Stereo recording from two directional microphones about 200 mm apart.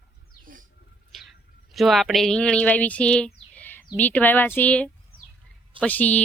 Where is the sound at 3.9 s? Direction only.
10° left (ahead or behind).